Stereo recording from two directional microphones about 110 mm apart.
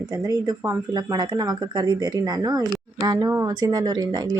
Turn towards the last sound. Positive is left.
turn(degrees=-40)  # may be behind; listen again after turning